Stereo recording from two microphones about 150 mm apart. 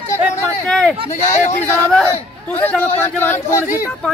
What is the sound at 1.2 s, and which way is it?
Speech, 50° left (ahead or behind).